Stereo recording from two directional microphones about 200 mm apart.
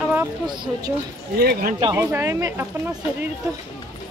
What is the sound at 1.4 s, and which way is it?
Speech, 50° right (ahead or behind).